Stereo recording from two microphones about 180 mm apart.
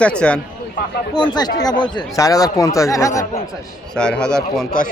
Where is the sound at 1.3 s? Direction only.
20° left (ahead or behind).